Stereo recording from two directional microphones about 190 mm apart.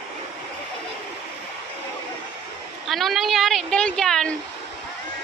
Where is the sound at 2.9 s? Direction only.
Centre (ahead or behind).